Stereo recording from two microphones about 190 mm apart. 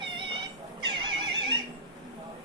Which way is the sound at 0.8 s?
25° right (ahead or behind).